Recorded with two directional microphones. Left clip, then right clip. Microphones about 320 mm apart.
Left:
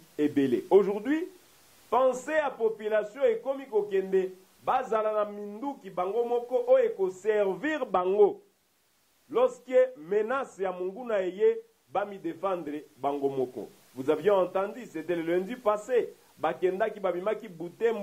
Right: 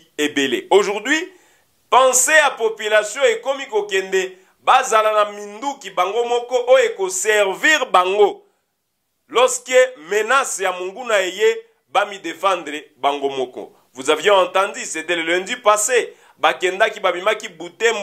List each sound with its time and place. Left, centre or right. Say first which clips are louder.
0.1 s a man's voice: right 8 dB; centre